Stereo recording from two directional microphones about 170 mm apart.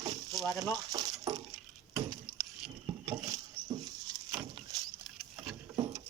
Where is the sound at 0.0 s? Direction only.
20° right (ahead or behind).